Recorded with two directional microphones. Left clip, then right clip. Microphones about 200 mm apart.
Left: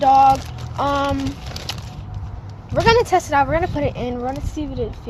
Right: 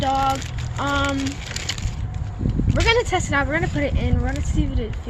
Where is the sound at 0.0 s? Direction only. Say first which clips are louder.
Left 8 dB; 50° left (ahead or behind).